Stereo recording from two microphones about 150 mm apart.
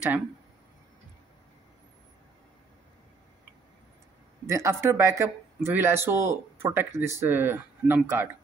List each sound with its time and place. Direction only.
4.5 s a man's voice: 20° right (ahead or behind)